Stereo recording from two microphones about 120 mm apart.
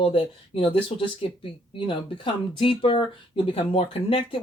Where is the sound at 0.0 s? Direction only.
50° left (ahead or behind).